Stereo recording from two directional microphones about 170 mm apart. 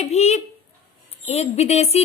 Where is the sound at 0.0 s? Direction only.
40° left (ahead or behind).